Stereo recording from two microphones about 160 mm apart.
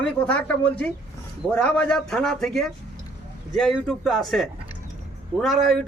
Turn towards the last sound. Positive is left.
turn(degrees=0)  # may be behind; listen again after turning